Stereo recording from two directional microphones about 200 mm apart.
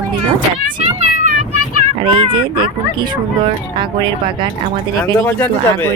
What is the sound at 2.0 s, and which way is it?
Speech, 25° right (ahead or behind).